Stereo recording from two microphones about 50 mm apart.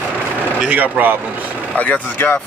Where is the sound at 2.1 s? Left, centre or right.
Left.